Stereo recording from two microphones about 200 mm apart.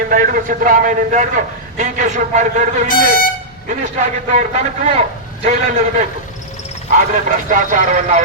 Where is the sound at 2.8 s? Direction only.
45° left (ahead or behind).